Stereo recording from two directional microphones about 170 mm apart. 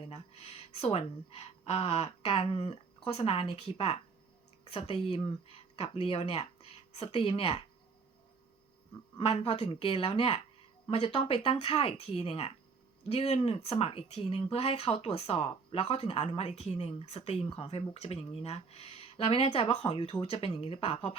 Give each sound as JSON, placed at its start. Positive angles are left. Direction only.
{"t": 0.0, "sound": "speech", "side_deg": 35}
{"t": 9.1, "sound": "speech", "side_deg": 35}